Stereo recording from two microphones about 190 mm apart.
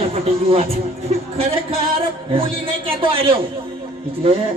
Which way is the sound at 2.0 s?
30° right (ahead or behind).